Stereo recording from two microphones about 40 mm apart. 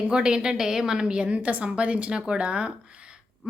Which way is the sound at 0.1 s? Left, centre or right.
Right.